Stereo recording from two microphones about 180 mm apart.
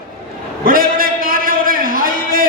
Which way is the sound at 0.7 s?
50° right (ahead or behind).